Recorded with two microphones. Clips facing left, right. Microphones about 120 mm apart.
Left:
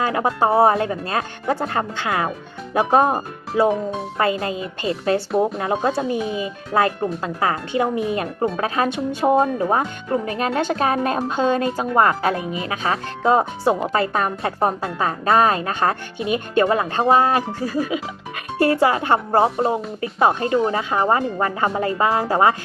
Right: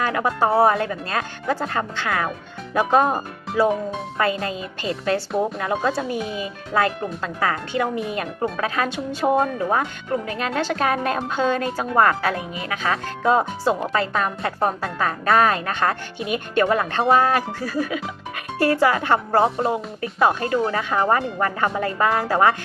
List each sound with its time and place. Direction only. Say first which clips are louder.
0.0 s speech: left 2 dB; 25° left (ahead or behind)
14.1 s speech: left 2 dB; 30° left (ahead or behind)